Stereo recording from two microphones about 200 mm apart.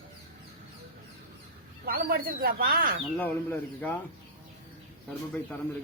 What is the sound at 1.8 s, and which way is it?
Speech, 50° right (ahead or behind).